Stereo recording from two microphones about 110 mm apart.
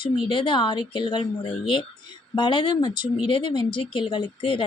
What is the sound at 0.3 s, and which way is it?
Speech, 50° left (ahead or behind).